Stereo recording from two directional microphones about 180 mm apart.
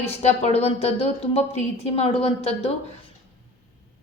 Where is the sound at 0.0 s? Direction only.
35° left (ahead or behind).